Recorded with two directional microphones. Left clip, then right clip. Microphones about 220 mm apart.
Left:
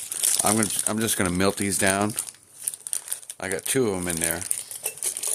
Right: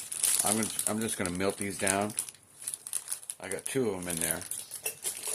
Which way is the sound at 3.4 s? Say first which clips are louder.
Left 8 dB; 55° left (ahead or behind).